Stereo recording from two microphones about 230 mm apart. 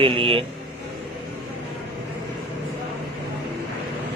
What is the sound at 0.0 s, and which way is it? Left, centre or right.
Speech, right.